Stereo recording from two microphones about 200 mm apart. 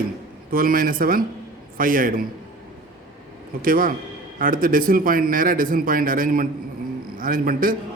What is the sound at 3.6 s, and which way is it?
A man's voice, 45° right (ahead or behind).